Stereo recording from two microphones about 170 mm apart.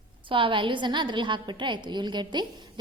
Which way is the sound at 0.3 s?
30° right (ahead or behind).